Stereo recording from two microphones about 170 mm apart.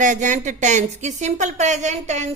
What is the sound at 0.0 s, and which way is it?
A woman's voice, 50° right (ahead or behind).